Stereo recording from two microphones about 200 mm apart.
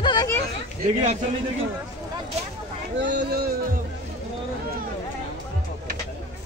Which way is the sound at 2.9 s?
60° right (ahead or behind).